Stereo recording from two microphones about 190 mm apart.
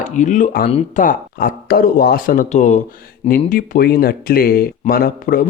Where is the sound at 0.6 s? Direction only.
30° left (ahead or behind).